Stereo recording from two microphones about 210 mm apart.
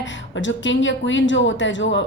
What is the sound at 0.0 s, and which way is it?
A woman's voice, 60° left (ahead or behind).